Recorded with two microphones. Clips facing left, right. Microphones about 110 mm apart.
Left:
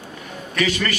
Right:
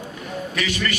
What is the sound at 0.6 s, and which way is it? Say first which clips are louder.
Speech: left 5 dB; 45° left (ahead or behind).